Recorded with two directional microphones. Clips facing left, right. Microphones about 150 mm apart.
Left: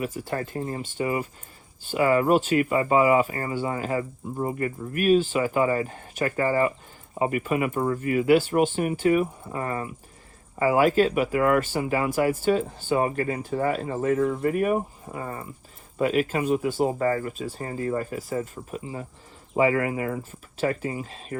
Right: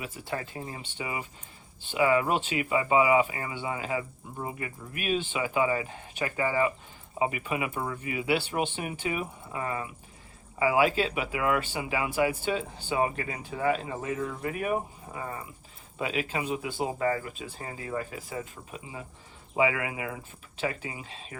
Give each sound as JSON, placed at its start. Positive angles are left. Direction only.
{"t": 0.0, "sound": "speech", "side_deg": 40}